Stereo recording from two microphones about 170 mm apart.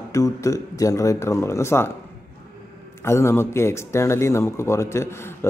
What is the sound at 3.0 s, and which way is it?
Speech, 15° left (ahead or behind).